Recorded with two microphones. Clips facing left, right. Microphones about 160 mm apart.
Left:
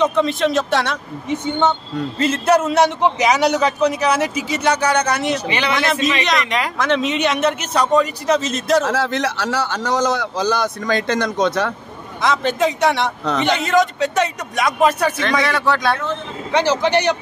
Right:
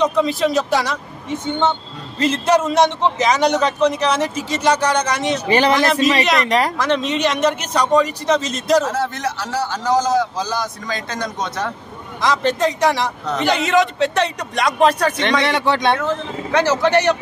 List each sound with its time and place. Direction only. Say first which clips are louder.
0.0 s a man's voice: even; centre (ahead or behind)
2.1 s a man's voice: even; 5° left (ahead or behind)
5.5 s a man's voice: right 5 dB; 40° right (ahead or behind)
6.8 s a man's voice: even; centre (ahead or behind)
8.8 s a man's voice: left 2 dB; 80° left
12.2 s a man's voice: even; centre (ahead or behind)
15.4 s speech: right 1 dB; 25° right (ahead or behind)
16.5 s speech: right 1 dB; 15° left (ahead or behind)